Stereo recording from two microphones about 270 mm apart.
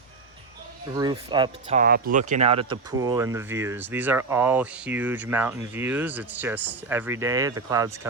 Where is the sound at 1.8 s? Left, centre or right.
Right.